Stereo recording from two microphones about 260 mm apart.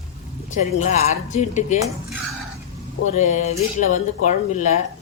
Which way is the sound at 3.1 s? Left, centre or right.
Left.